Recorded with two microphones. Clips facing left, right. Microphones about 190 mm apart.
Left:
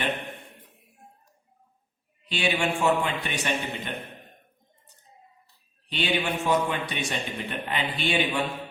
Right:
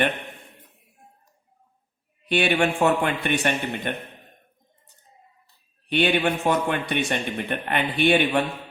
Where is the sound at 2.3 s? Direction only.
60° right (ahead or behind).